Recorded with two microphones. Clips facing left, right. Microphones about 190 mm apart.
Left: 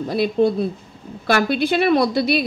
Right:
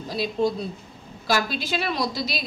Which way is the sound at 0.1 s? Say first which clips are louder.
Left 6 dB; 60° left (ahead or behind).